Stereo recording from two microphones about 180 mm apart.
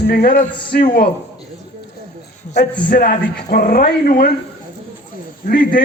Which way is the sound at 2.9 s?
55° left (ahead or behind).